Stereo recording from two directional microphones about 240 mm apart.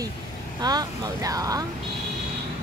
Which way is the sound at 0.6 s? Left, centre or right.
Centre.